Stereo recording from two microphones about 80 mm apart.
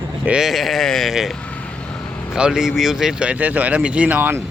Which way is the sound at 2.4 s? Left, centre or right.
Centre.